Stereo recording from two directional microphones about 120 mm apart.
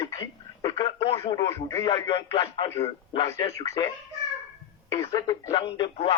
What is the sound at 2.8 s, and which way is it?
Speech, 55° left (ahead or behind).